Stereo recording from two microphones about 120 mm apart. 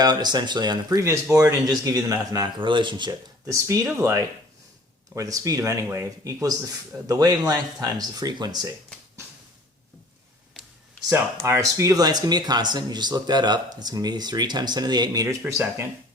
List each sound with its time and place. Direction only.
0.0 s speech: 35° right (ahead or behind)
2.6 s speech: 45° right (ahead or behind)
3.4 s speech: 25° right (ahead or behind)
11.4 s speech: 25° right (ahead or behind)